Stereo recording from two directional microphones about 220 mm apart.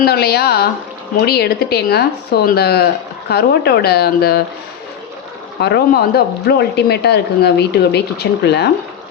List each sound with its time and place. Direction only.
0.0 s speech: 45° left (ahead or behind)
5.5 s speech: 50° left (ahead or behind)